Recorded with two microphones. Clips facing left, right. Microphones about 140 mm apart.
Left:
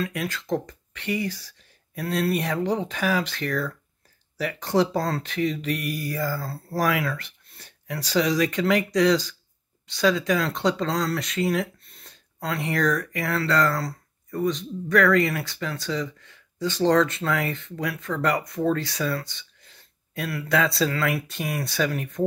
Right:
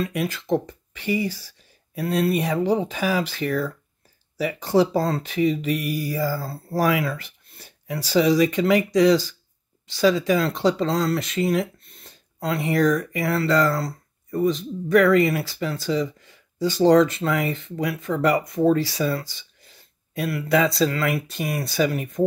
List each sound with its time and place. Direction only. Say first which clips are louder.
0.0 s speech: right 3 dB; 5° right (ahead or behind)